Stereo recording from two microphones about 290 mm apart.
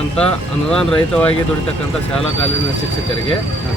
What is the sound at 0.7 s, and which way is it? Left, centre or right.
Speech, centre.